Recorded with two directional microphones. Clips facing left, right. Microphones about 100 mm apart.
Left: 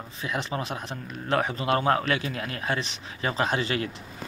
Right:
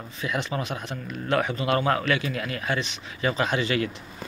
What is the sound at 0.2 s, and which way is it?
A man's voice, 30° left (ahead or behind).